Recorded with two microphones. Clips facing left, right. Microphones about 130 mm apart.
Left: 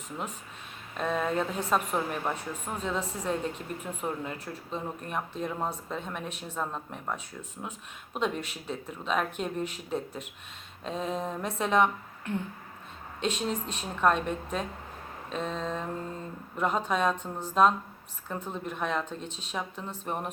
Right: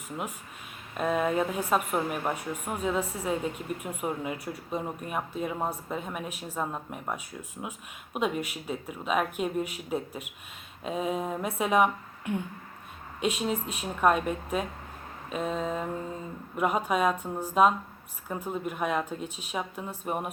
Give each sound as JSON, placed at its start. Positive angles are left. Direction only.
{"t": 0.9, "sound": "a woman's voice", "side_deg": -10}